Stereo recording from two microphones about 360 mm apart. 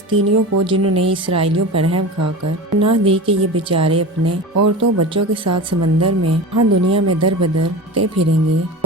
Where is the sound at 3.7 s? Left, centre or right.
Right.